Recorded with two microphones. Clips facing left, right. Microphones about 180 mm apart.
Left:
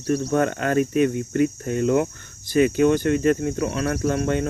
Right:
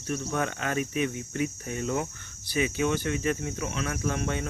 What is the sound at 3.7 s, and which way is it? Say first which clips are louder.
Speech: left 8 dB; 60° left (ahead or behind).